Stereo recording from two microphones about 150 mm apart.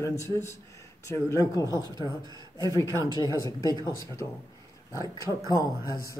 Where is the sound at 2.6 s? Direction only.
20° right (ahead or behind).